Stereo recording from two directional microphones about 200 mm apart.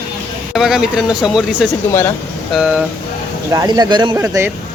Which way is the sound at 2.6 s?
5° right (ahead or behind).